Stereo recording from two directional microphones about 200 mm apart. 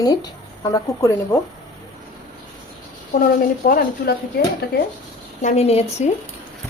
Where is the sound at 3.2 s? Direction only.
45° left (ahead or behind).